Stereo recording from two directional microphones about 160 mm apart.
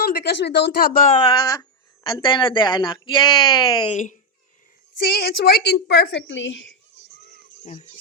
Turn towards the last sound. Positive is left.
turn(degrees=50)  # may be behind; listen again after turning